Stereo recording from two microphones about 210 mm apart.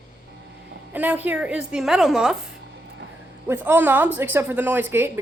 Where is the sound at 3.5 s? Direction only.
10° right (ahead or behind).